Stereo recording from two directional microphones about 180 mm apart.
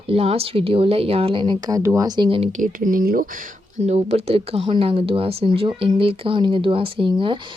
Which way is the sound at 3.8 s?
35° right (ahead or behind).